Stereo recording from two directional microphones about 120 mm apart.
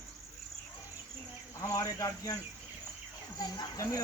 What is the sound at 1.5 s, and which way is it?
Speech, 25° left (ahead or behind).